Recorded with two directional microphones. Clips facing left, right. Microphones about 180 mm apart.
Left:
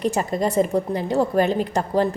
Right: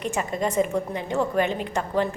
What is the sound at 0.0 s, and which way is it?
A woman's voice, 35° left (ahead or behind).